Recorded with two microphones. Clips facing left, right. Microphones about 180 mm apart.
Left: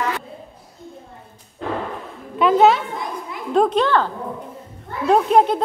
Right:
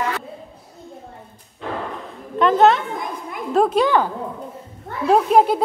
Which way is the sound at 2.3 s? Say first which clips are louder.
Even; 5° left (ahead or behind).